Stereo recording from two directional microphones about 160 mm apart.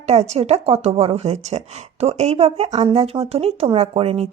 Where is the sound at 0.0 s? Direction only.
45° right (ahead or behind).